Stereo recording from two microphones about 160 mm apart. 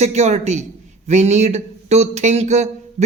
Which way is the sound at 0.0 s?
45° right (ahead or behind).